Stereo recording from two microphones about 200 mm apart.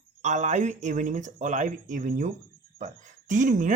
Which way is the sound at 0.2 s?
35° right (ahead or behind).